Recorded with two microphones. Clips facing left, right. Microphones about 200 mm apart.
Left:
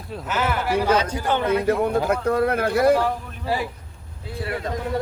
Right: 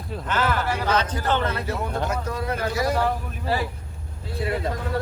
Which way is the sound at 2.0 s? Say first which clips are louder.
Left 7 dB; 60° left (ahead or behind).